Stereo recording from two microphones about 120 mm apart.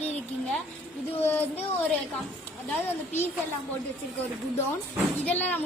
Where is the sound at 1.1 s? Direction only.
15° left (ahead or behind).